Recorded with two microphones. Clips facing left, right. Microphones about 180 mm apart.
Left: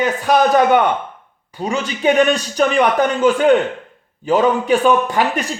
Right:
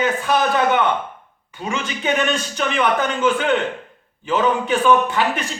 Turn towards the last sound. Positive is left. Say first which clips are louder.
# left 3 dB
turn(degrees=40)  # may be behind; listen again after turning